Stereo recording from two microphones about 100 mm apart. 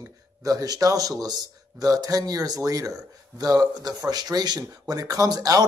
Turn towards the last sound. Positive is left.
turn(degrees=-40)  # may be behind; listen again after turning